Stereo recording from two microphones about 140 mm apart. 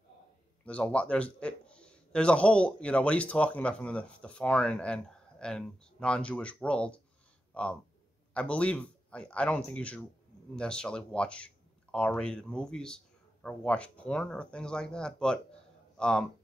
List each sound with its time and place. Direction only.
0.7 s a man's voice: 10° left (ahead or behind)